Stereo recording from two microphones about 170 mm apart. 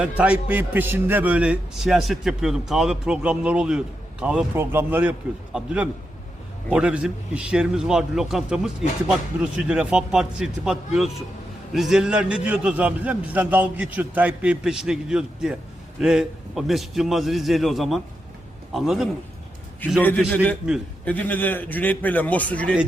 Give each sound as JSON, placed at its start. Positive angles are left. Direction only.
{"t": 0.2, "sound": "a man's voice", "side_deg": -10}
{"t": 20.0, "sound": "a man's voice", "side_deg": 10}